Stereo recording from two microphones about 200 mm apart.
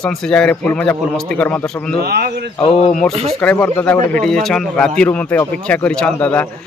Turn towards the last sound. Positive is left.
turn(degrees=5)  # may be behind; listen again after turning